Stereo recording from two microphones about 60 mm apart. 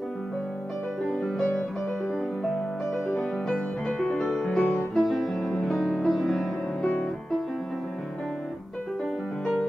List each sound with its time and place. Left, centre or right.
1.2 s music: centre
4.1 s music: centre
6.8 s music: centre